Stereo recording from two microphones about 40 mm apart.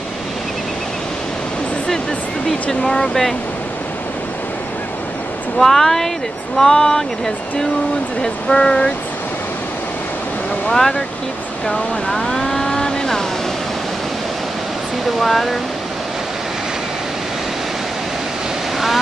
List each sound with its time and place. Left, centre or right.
2.8 s speech: centre
5.6 s speech: centre
8.2 s speech: centre
10.7 s speech: centre
11.6 s vehicle: centre
15.0 s speech: centre